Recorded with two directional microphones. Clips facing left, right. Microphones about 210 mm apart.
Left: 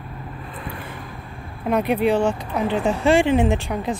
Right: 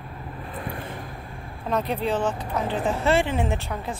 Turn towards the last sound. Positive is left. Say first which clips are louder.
# left 7 dB
turn(degrees=15)  # may be behind; listen again after turning